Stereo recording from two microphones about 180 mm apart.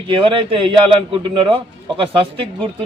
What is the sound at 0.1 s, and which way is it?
A man's voice, 30° right (ahead or behind).